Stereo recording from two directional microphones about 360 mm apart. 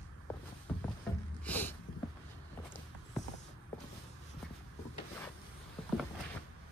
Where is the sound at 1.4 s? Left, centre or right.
Centre.